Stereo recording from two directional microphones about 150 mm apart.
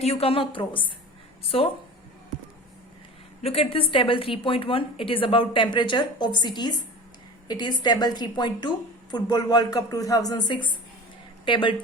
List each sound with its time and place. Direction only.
0.0 s a woman's voice: 45° left (ahead or behind)
3.4 s a woman's voice: 40° left (ahead or behind)